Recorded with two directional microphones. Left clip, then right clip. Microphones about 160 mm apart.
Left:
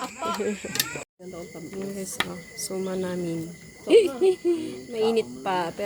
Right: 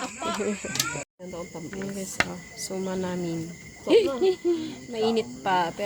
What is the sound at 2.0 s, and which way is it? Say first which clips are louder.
Speech: right 3 dB; centre (ahead or behind).